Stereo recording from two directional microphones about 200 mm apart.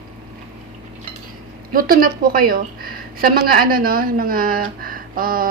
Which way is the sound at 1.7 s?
45° right (ahead or behind).